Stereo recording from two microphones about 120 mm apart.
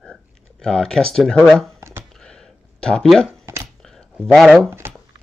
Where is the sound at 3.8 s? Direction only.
5° left (ahead or behind).